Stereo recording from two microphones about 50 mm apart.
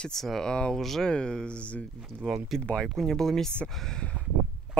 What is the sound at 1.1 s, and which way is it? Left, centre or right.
Speech, centre.